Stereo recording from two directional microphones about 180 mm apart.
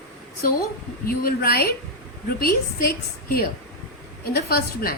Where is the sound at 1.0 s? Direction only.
55° left (ahead or behind).